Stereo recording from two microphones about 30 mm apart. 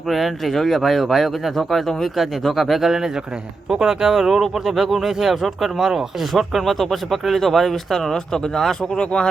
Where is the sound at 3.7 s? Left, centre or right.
Centre.